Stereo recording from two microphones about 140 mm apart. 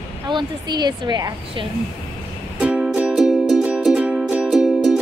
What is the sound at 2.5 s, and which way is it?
Music, 10° right (ahead or behind).